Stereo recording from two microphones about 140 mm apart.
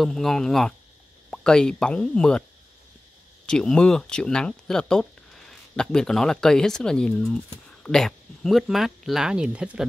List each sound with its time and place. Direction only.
0.0 s speech: centre (ahead or behind)
3.4 s speech: 5° left (ahead or behind)